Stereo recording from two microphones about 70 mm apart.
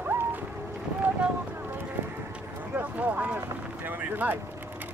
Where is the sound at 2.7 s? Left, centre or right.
Right.